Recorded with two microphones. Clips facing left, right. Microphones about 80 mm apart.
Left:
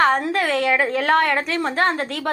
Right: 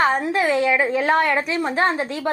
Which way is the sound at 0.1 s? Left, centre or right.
Left.